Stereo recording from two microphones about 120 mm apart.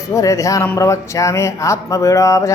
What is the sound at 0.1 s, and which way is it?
Speech, 25° left (ahead or behind).